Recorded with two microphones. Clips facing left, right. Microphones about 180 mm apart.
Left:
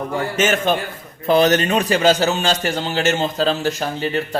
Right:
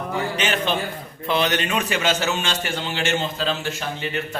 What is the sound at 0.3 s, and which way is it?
A man's voice, 45° left (ahead or behind).